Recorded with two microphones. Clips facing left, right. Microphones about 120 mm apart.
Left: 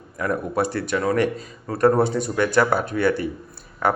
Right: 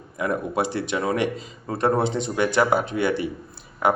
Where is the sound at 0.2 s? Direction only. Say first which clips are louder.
Left 1 dB; 20° right (ahead or behind).